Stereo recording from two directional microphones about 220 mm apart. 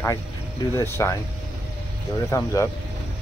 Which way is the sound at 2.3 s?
15° left (ahead or behind).